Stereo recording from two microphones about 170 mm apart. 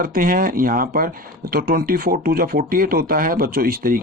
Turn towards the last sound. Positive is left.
turn(degrees=-60)  # may be behind; listen again after turning